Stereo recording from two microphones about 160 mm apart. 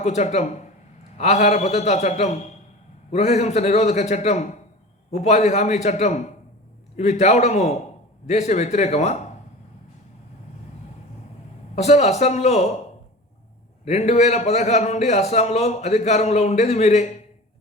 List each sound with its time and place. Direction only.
0.0 s a man's voice: 45° left (ahead or behind)
11.7 s a man's voice: 45° left (ahead or behind)
13.8 s a man's voice: 45° left (ahead or behind)